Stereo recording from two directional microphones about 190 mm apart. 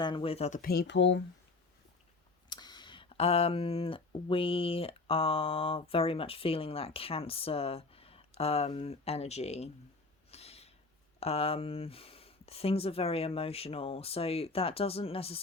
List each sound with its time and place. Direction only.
0.0 s speech: 25° left (ahead or behind); by 1.2 s 70° left (ahead or behind)
2.5 s speech: 20° left (ahead or behind)
10.3 s a sound: 35° left (ahead or behind)
11.2 s speech: 30° left (ahead or behind)